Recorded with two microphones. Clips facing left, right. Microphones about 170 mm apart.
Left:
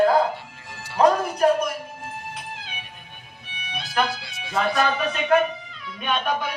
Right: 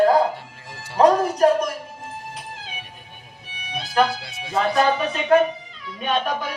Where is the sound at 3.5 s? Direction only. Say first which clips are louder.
Right 3 dB; 40° right (ahead or behind).